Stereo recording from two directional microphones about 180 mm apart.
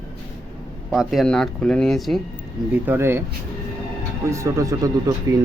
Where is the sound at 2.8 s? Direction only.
15° right (ahead or behind).